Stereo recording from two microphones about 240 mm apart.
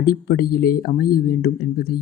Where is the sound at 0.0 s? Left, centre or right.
Left.